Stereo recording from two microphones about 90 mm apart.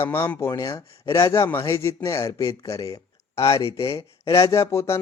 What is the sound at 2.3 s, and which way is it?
Speech, 45° left (ahead or behind).